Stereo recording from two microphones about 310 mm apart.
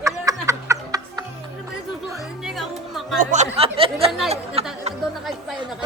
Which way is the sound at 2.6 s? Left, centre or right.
Centre.